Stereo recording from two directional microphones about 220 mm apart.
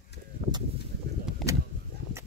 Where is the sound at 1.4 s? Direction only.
Centre (ahead or behind).